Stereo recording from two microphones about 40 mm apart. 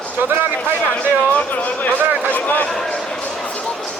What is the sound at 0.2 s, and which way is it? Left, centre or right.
Speech, right.